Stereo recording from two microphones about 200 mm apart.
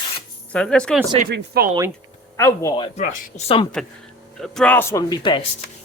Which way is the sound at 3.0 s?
40° left (ahead or behind).